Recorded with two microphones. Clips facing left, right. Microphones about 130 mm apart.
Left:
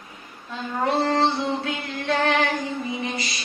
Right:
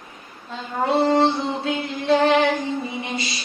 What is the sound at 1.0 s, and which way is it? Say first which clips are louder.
Music: right 5 dB; 20° right (ahead or behind).